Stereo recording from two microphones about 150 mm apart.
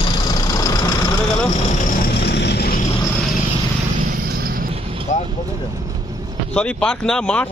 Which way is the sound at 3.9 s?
80° right.